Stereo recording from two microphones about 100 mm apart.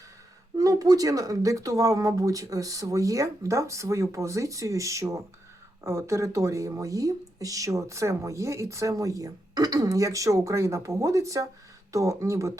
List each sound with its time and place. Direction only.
0.5 s speech: 35° right (ahead or behind)